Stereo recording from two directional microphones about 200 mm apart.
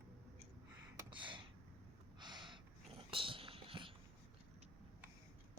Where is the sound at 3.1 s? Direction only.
25° right (ahead or behind).